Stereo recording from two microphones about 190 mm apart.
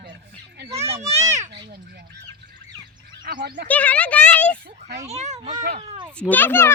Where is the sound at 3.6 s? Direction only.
10° left (ahead or behind).